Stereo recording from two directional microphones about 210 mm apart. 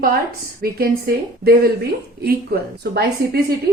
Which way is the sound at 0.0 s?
45° right (ahead or behind).